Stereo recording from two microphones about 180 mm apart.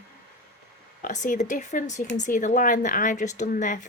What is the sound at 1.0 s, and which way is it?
A woman's voice, 45° left (ahead or behind).